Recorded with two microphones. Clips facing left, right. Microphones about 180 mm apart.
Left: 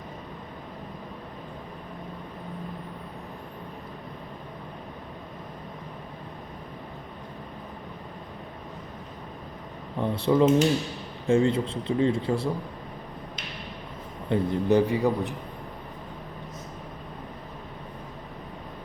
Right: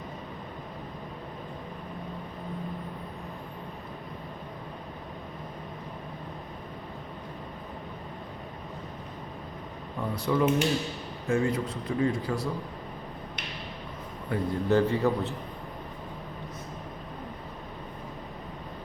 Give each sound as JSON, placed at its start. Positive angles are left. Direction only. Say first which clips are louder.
{"t": 10.0, "sound": "speech", "louder": "left 5 dB", "side_deg": 25}
{"t": 14.3, "sound": "a man's voice", "louder": "left 3 dB", "side_deg": 15}